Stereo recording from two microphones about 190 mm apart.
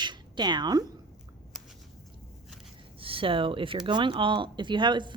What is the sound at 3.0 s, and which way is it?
Speech, 30° right (ahead or behind).